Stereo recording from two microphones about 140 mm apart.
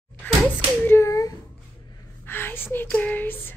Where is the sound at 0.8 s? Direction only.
20° left (ahead or behind).